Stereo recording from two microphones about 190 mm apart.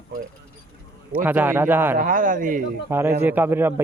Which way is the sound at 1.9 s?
45° right (ahead or behind).